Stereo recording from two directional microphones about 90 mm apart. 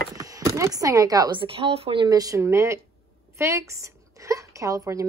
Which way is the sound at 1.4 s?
90° right.